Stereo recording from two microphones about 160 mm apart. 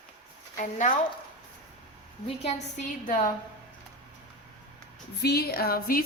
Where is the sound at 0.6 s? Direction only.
50° left (ahead or behind).